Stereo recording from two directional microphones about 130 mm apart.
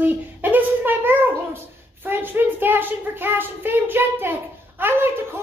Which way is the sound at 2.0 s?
15° right (ahead or behind).